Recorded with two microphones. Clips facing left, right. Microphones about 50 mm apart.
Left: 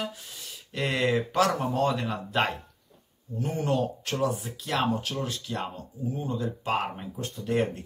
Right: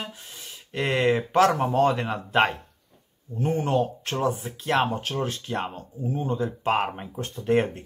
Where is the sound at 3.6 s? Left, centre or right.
Right.